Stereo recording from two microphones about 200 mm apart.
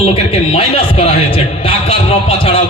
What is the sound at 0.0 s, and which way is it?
A man's voice, 30° left (ahead or behind).